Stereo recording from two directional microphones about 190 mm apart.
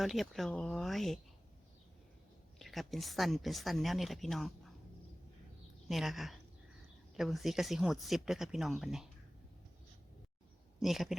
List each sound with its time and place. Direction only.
0.0 s speech: centre (ahead or behind)
2.6 s speech: centre (ahead or behind)
5.9 s speech: centre (ahead or behind)
10.8 s speech: centre (ahead or behind)